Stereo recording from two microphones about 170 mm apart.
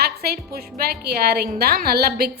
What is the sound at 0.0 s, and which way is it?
A woman's voice, 65° right (ahead or behind).